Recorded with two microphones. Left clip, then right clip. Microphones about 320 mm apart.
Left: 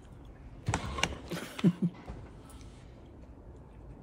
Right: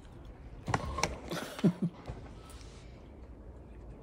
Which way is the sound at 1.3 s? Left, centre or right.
Centre.